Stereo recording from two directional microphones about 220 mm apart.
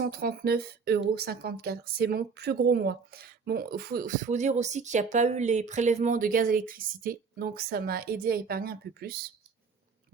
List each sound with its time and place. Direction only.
0.0 s speech: 45° right (ahead or behind)